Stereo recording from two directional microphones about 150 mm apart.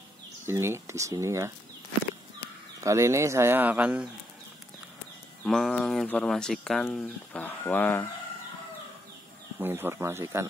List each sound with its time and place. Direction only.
0.5 s speech: 15° right (ahead or behind)
2.8 s speech: 20° right (ahead or behind)
5.4 s speech: 5° left (ahead or behind)
9.6 s speech: 15° right (ahead or behind)